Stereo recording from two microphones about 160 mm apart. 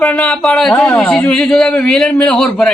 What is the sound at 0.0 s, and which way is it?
A man's voice, 5° left (ahead or behind).